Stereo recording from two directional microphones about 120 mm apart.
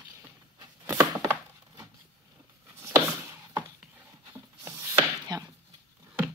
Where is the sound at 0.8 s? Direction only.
20° right (ahead or behind).